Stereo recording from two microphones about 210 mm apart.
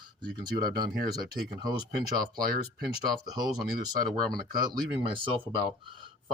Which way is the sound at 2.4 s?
45° right (ahead or behind).